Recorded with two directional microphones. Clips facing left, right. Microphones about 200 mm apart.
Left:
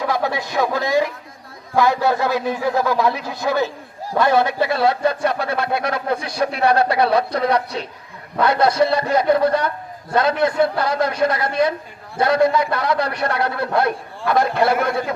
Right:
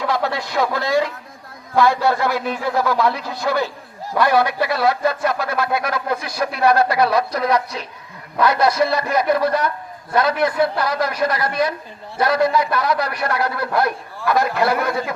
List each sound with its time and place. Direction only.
0.0 s a man's voice: 15° left (ahead or behind)